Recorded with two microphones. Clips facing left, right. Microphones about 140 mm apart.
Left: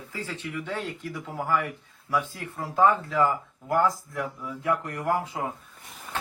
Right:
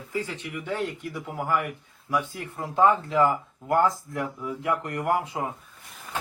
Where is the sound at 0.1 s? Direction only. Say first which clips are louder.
Right 3 dB; 15° right (ahead or behind).